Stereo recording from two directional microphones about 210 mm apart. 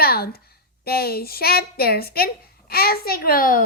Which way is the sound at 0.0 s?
45° left (ahead or behind).